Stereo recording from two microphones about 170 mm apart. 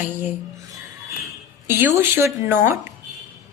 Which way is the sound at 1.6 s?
10° right (ahead or behind).